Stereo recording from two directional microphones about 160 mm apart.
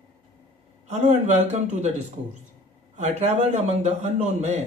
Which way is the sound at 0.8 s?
45° right (ahead or behind).